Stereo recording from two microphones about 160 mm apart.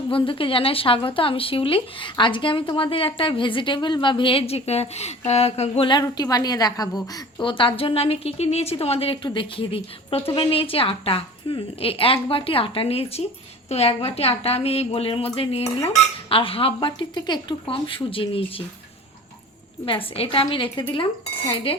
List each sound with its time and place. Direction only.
0.1 s speech: 35° left (ahead or behind)
19.8 s speech: 35° left (ahead or behind)